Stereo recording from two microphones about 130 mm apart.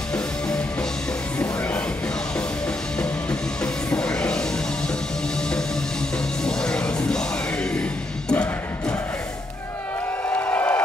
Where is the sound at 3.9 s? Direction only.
5° left (ahead or behind).